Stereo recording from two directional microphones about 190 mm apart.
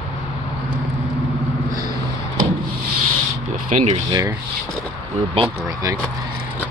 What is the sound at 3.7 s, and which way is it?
Speech, 35° right (ahead or behind).